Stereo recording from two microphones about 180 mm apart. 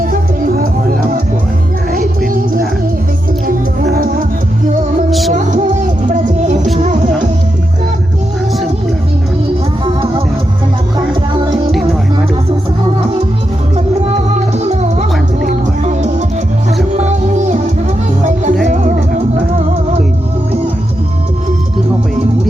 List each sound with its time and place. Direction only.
0.0 s music: 50° right (ahead or behind)
5.3 s music: 40° right (ahead or behind)
6.7 s music: 40° right (ahead or behind)
9.8 s music: 30° right (ahead or behind)
14.3 s music: 40° right (ahead or behind)